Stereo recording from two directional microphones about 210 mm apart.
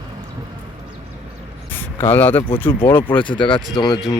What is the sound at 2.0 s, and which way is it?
Speech, 10° left (ahead or behind).